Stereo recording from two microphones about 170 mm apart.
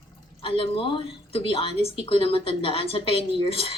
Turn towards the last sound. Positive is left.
turn(degrees=35)  # may be behind; listen again after turning